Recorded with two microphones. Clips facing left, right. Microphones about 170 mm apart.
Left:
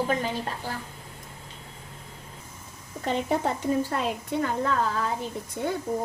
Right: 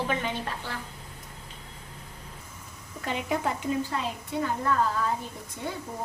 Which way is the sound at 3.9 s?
50° left (ahead or behind).